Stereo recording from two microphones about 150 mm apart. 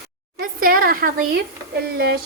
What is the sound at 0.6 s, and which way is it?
Speech, 75° right (ahead or behind).